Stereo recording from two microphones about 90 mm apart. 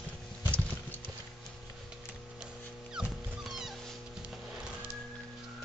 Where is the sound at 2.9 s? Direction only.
5° right (ahead or behind).